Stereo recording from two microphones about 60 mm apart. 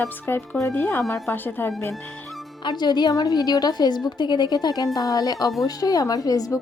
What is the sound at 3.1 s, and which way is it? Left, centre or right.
A woman's voice, left.